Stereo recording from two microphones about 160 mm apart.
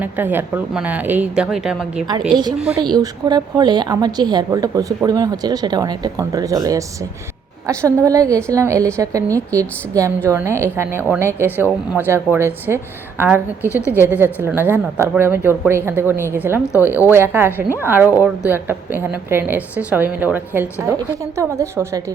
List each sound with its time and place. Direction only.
0.0 s a woman's voice: 10° right (ahead or behind)
2.3 s a woman's voice: 25° right (ahead or behind)
2.6 s a woman's voice: 5° right (ahead or behind)
3.0 s a woman's voice: 25° right (ahead or behind)